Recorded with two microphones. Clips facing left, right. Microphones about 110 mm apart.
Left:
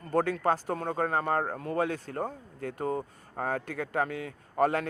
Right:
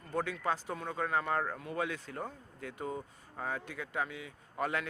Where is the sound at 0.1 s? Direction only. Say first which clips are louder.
Left 8 dB; 45° left (ahead or behind).